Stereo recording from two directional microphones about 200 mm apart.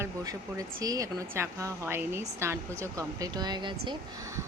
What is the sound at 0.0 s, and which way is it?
A woman's voice, 15° right (ahead or behind).